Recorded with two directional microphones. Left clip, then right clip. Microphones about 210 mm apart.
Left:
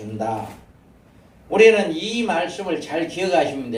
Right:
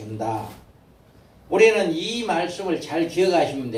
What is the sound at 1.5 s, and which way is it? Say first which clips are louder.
Speech: left 3 dB; 30° left (ahead or behind).